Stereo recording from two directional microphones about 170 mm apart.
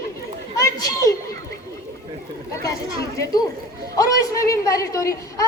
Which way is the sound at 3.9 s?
20° left (ahead or behind).